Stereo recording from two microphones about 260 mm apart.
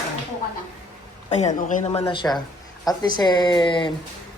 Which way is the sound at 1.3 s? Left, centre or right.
Left.